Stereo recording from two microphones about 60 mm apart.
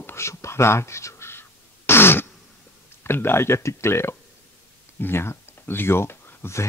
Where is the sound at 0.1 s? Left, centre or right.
Left.